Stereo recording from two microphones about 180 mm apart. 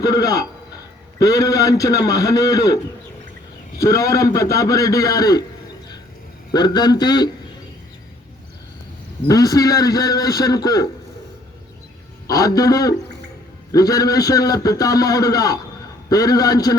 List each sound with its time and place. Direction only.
0.0 s a man's voice: 20° left (ahead or behind)
3.8 s a man's voice: 20° left (ahead or behind)
6.5 s a man's voice: 25° left (ahead or behind)
9.2 s a man's voice: 20° left (ahead or behind)
12.3 s a man's voice: 20° left (ahead or behind)